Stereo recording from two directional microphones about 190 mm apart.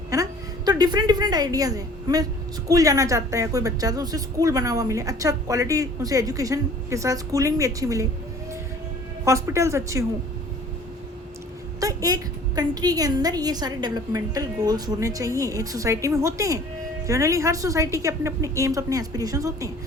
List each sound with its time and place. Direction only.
0.1 s a woman's voice: 20° right (ahead or behind)
9.2 s a woman's voice: 15° right (ahead or behind)
11.8 s a woman's voice: 20° right (ahead or behind)